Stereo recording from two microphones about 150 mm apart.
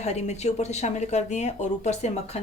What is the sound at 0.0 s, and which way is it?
A woman's voice, 45° left (ahead or behind).